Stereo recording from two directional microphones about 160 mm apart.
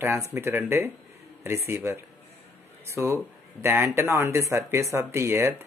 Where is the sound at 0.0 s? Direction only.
15° right (ahead or behind).